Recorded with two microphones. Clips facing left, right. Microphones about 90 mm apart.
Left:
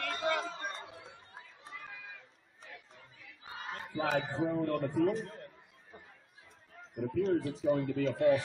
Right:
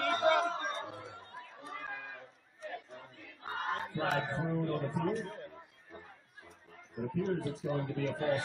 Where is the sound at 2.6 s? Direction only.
45° right (ahead or behind).